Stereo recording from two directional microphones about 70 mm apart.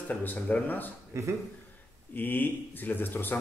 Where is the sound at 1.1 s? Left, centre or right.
Right.